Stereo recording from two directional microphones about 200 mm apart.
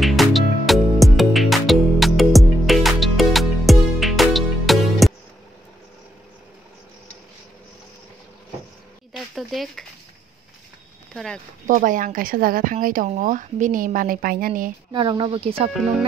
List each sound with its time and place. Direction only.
0.0 s music: centre (ahead or behind)
9.1 s a sound: centre (ahead or behind)
11.1 s speech: 5° left (ahead or behind)
11.6 s speech: 40° right (ahead or behind)
14.9 s speech: 25° right (ahead or behind)